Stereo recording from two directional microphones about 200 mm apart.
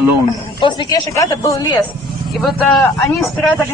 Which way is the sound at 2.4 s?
Centre (ahead or behind).